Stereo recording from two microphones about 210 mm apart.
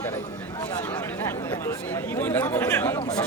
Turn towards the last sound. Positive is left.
turn(degrees=10)  # may be behind; listen again after turning